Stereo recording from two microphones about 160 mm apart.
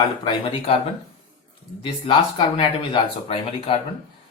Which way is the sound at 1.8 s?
35° left (ahead or behind).